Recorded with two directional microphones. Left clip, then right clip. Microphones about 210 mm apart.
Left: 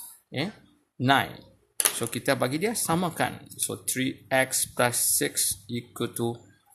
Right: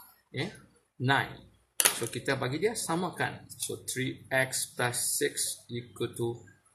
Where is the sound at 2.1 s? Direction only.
55° left (ahead or behind).